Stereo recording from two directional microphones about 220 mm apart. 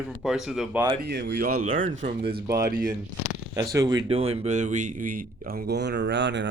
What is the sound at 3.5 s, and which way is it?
A man's voice, 15° right (ahead or behind).